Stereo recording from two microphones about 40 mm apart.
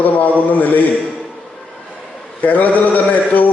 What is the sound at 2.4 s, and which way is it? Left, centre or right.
Speech, left.